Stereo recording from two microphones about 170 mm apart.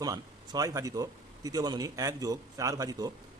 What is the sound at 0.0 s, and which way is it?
A man's voice, 20° right (ahead or behind).